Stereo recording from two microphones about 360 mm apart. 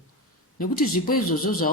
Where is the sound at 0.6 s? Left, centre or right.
Left.